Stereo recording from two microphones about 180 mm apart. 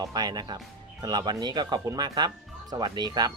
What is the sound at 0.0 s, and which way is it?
Speech, 20° right (ahead or behind).